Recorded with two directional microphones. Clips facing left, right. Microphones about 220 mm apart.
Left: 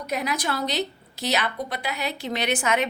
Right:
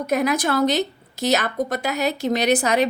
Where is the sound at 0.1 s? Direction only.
50° right (ahead or behind).